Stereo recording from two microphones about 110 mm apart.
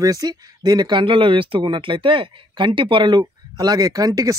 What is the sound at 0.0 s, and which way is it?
Speech, 35° right (ahead or behind).